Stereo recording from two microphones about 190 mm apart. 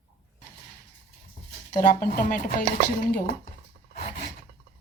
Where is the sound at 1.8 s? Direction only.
45° left (ahead or behind).